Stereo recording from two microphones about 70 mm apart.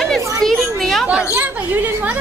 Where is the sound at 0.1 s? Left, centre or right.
Centre.